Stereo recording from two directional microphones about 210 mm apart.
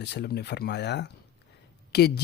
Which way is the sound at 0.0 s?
50° left (ahead or behind).